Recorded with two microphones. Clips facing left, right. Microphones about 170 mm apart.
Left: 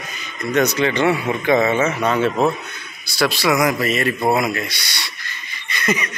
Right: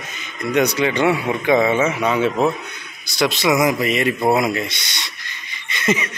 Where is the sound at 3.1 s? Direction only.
20° right (ahead or behind).